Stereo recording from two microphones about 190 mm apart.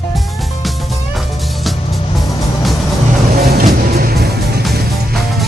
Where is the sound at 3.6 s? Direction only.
55° right (ahead or behind).